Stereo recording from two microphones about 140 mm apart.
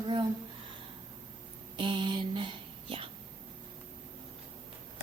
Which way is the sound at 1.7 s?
35° right (ahead or behind).